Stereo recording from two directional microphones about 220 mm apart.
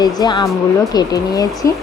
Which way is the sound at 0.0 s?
20° left (ahead or behind).